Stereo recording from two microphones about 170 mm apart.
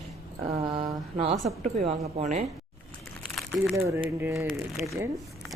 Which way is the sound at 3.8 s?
15° right (ahead or behind).